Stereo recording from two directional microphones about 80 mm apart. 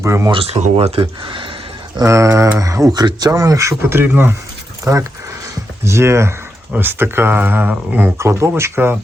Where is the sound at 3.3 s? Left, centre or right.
Right.